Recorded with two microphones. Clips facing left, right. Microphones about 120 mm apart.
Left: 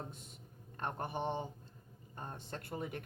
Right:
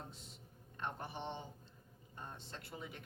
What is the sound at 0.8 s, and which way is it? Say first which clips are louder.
A man's voice: left 5 dB; 50° left (ahead or behind).